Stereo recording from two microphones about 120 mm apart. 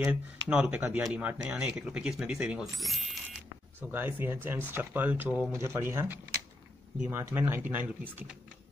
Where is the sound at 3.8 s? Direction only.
20° right (ahead or behind).